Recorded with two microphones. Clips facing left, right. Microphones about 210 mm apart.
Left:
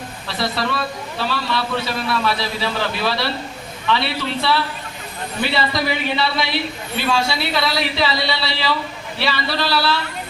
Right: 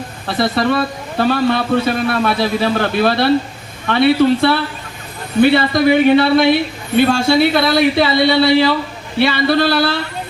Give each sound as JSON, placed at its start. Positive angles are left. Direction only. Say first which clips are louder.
{"t": 0.3, "sound": "a woman's voice", "louder": "right 8 dB", "side_deg": -55}